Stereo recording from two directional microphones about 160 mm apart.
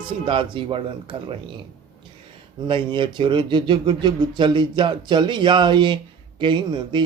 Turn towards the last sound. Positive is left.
turn(degrees=-30)  # may be behind; listen again after turning